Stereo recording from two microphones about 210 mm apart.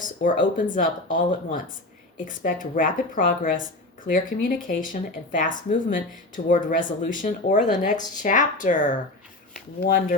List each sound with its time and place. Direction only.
0.0 s a sound: 40° left (ahead or behind)
0.5 s speech: 40° left (ahead or behind)
9.8 s speech: 50° left (ahead or behind)